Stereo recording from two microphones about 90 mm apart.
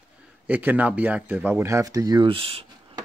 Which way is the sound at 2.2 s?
90° right.